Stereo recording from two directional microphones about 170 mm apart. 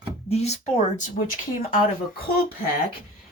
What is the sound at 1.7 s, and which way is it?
Speech, 60° left (ahead or behind).